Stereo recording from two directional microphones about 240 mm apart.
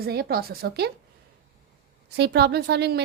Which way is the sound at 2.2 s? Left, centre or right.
Right.